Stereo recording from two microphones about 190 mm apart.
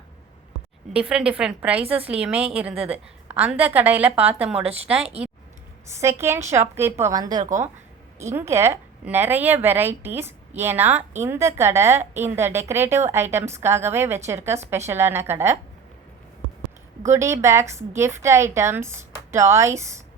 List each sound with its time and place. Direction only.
0.9 s speech: 5° right (ahead or behind)
6.0 s a woman's voice: 15° right (ahead or behind)
17.0 s speech: 15° right (ahead or behind)